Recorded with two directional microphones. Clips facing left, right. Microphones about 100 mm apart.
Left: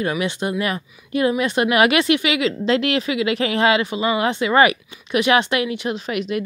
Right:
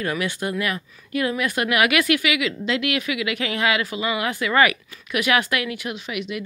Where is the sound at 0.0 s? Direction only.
20° left (ahead or behind).